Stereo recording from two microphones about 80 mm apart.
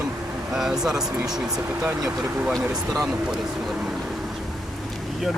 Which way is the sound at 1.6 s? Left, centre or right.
Right.